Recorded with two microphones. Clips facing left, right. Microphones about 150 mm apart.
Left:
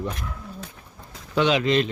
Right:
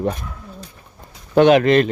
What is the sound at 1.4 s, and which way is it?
Speech, 55° right (ahead or behind).